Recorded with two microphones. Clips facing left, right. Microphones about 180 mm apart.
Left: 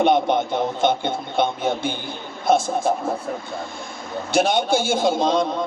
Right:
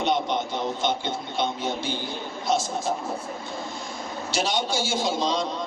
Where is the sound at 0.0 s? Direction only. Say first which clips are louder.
Left 7 dB; 55° left (ahead or behind).